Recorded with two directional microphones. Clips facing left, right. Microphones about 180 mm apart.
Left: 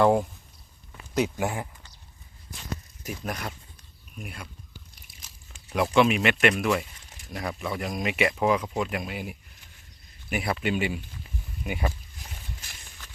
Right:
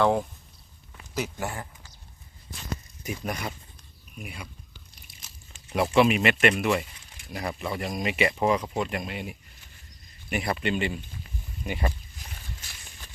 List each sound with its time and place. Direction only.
0.0 s speech: 10° left (ahead or behind)
1.4 s speech: 15° left (ahead or behind)
3.0 s speech: centre (ahead or behind)
5.7 s speech: centre (ahead or behind)